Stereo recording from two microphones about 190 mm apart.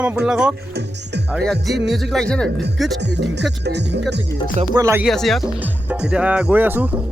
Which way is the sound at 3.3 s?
65° right (ahead or behind).